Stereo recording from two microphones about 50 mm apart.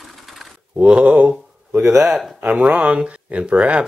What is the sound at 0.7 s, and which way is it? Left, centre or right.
Speech, right.